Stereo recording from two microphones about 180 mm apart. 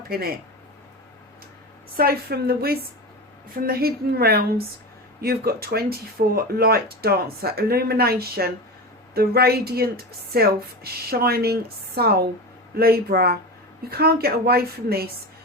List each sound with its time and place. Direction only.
0.1 s speech: 55° right (ahead or behind)
2.0 s speech: 60° right (ahead or behind)